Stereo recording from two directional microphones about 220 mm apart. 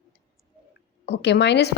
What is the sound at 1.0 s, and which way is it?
Speech, 50° left (ahead or behind).